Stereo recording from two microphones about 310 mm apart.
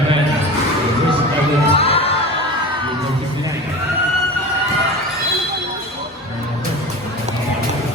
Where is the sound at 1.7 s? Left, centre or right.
Centre.